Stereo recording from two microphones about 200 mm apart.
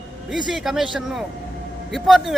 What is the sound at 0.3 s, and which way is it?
A man's voice, centre (ahead or behind).